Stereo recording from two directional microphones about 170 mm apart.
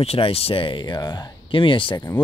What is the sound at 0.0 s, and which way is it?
Speech, 35° left (ahead or behind).